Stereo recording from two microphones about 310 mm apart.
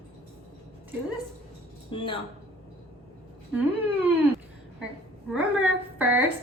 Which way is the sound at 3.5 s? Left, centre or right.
Centre.